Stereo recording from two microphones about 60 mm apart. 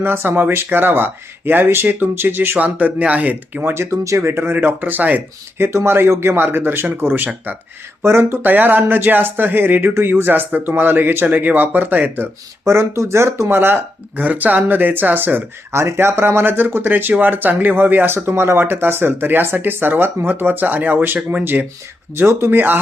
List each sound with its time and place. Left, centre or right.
0.0 s speech: right
3.8 s speech: right
4.5 s speech: right
5.5 s speech: right
12.6 s speech: right
14.2 s speech: right
15.7 s speech: right
22.3 s speech: right